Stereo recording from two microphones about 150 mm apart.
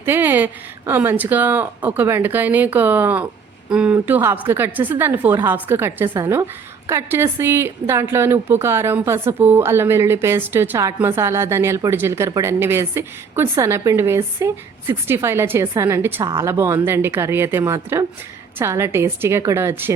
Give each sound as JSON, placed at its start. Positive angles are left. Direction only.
{"t": 0.0, "sound": "a woman's voice", "side_deg": -15}